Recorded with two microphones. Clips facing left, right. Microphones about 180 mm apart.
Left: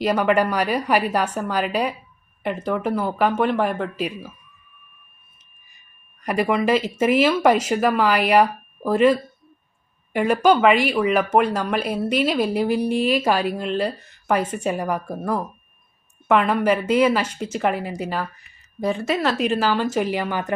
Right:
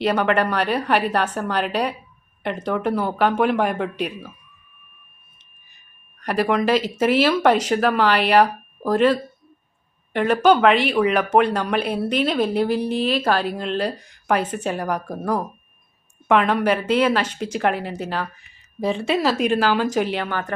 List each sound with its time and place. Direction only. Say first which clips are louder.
0.0 s speech: left 1 dB; 5° left (ahead or behind)
6.1 s speech: even; 5° left (ahead or behind)
18.9 s speech: right 2 dB; 30° right (ahead or behind)
19.2 s speech: right 2 dB; centre (ahead or behind)